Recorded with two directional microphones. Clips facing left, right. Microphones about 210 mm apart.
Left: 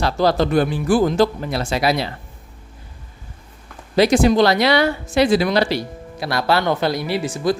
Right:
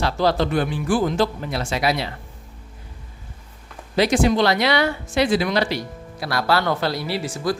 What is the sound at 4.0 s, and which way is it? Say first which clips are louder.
Speech: left 4 dB; 40° left (ahead or behind).